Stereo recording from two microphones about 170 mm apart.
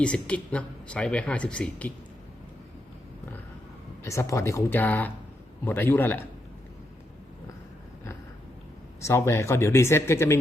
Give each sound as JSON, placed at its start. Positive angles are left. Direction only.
{"t": 0.0, "sound": "speech", "side_deg": 5}
{"t": 4.0, "sound": "speech", "side_deg": 15}
{"t": 9.0, "sound": "speech", "side_deg": 15}